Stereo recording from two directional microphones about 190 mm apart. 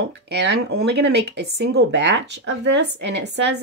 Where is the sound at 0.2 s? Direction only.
65° right (ahead or behind).